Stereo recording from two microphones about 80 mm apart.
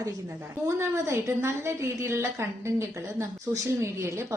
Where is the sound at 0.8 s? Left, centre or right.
Right.